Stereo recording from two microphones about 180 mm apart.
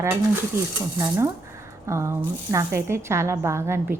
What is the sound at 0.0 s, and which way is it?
Speech, 15° right (ahead or behind).